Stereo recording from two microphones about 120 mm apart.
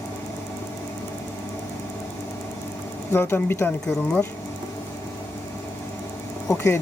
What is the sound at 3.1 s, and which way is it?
Speech, 20° left (ahead or behind).